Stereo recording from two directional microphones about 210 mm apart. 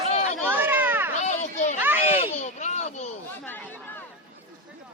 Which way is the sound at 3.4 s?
10° left (ahead or behind).